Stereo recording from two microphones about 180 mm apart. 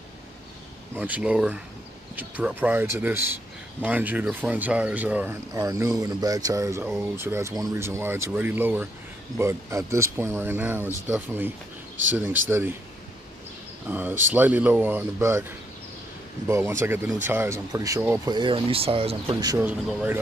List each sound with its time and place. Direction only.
0.9 s speech: 10° right (ahead or behind)
13.8 s speech: 10° right (ahead or behind)
16.4 s speech: 15° right (ahead or behind)
19.6 s speech: 10° right (ahead or behind)